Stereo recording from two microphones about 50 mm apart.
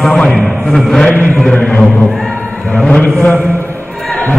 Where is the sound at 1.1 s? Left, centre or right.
Left.